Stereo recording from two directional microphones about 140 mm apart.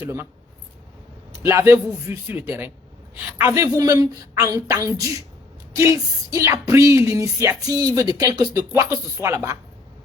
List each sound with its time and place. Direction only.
0.0 s a man's voice: 15° right (ahead or behind)
1.4 s a man's voice: 20° right (ahead or behind)